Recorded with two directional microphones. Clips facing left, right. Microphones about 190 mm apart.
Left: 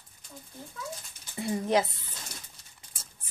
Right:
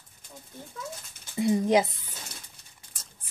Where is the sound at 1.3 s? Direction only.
20° right (ahead or behind).